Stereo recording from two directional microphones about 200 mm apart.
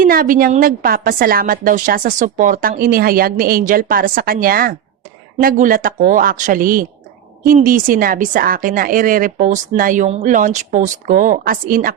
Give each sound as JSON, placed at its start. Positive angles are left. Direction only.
{"t": 0.0, "sound": "a woman's voice", "side_deg": -45}